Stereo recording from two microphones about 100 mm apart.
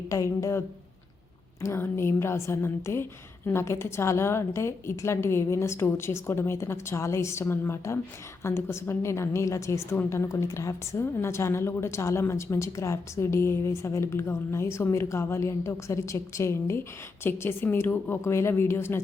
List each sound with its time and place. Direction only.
0.1 s a woman's voice: 30° left (ahead or behind)
1.6 s a woman's voice: 25° left (ahead or behind)